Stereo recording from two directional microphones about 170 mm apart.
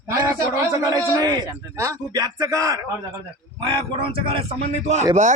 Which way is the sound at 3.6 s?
35° right (ahead or behind).